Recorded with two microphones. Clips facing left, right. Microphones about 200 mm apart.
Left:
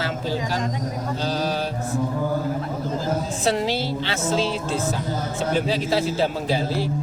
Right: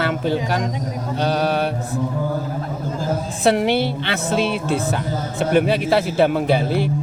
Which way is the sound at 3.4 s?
60° right (ahead or behind).